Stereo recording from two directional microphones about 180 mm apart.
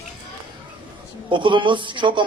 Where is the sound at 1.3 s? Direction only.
25° right (ahead or behind).